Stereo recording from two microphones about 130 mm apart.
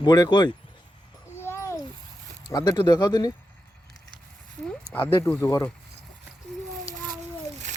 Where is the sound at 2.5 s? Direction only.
30° left (ahead or behind).